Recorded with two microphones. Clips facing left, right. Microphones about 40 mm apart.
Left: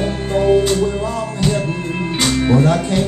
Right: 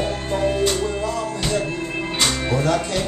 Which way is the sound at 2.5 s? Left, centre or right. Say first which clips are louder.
Left 9 dB; centre.